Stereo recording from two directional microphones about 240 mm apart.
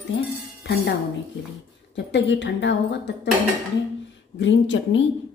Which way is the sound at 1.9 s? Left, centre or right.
Left.